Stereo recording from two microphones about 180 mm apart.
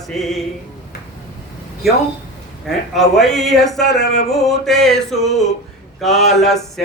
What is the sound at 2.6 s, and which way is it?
Speech, centre (ahead or behind).